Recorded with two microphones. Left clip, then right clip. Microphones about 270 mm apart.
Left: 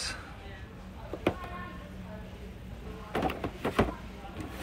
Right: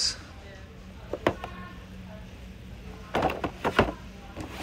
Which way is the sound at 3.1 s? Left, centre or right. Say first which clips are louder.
Right 5 dB; right.